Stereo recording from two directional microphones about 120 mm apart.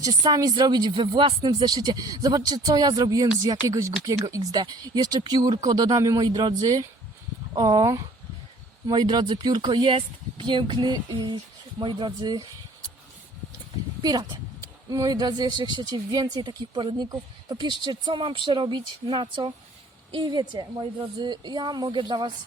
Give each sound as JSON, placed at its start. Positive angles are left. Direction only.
{"t": 0.0, "sound": "speech", "side_deg": -30}
{"t": 14.0, "sound": "speech", "side_deg": -30}